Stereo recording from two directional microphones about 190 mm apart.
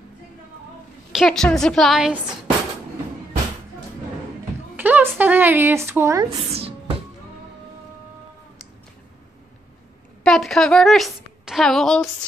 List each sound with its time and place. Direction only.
1.1 s a woman's voice: centre (ahead or behind)
4.7 s a sound: 10° right (ahead or behind)
5.2 s a woman's voice: 10° right (ahead or behind)
6.3 s speech: 30° right (ahead or behind)
10.2 s a woman's voice: 5° left (ahead or behind)